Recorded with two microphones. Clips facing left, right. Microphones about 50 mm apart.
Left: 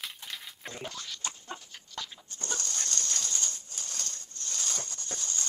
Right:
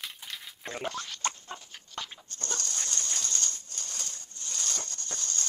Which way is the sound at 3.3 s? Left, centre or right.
Centre.